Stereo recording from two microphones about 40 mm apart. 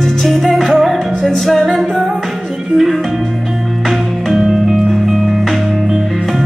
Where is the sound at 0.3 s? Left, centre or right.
Centre.